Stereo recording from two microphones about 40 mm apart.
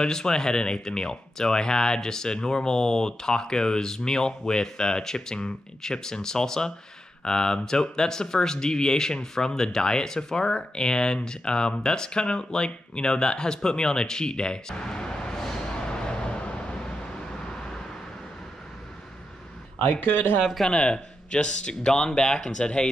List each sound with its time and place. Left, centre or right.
0.0 s speech: centre
19.9 s speech: left
20.7 s speech: left